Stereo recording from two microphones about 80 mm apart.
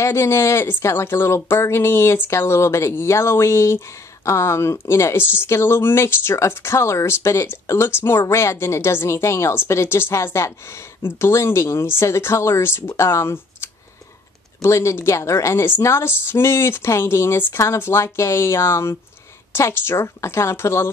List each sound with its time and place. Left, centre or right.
0.0 s speech: left